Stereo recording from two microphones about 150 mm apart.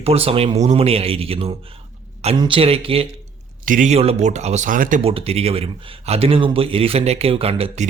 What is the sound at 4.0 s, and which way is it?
Speech, 45° right (ahead or behind).